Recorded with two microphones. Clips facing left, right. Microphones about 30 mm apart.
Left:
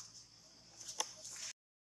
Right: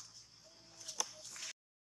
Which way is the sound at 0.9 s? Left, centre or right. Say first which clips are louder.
Right 1 dB; right.